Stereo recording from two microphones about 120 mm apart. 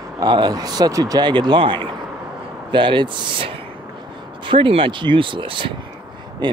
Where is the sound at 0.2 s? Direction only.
35° right (ahead or behind).